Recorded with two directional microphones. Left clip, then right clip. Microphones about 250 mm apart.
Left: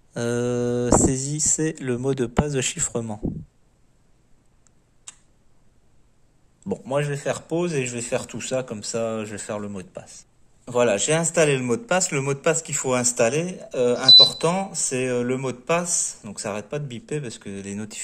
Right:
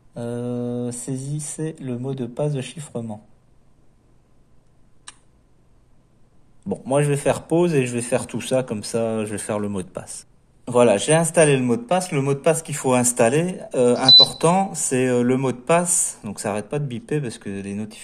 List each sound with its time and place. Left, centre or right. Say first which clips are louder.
0.1 s speech: left 4 dB; left
6.8 s speech: right 6 dB; centre